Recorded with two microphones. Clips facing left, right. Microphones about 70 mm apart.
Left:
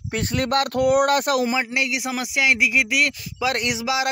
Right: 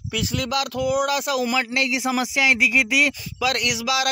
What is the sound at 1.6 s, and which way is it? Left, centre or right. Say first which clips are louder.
Speech: right 1 dB; centre.